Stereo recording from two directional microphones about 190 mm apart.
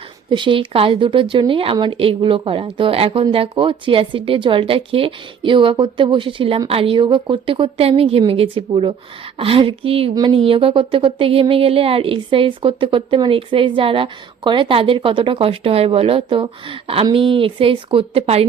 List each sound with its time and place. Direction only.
0.3 s speech: 25° right (ahead or behind)